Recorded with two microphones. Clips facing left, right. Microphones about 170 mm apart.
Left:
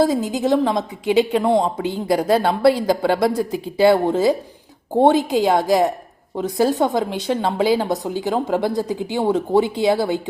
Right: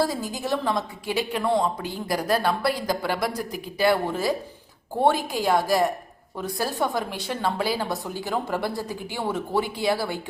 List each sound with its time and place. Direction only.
0.0 s speech: 20° left (ahead or behind)